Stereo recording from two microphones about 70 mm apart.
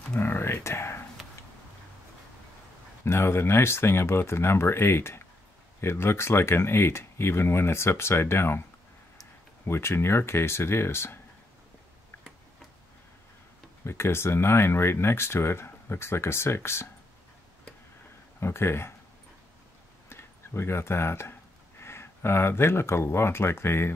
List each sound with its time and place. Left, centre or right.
0.2 s a sound: left
3.1 s speech: left
9.7 s speech: left
13.8 s speech: left
18.4 s speech: left
20.1 s speech: left